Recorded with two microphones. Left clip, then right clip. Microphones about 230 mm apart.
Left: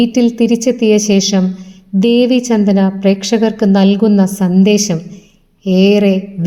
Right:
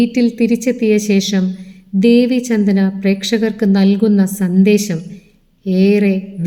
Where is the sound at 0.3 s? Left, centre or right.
Left.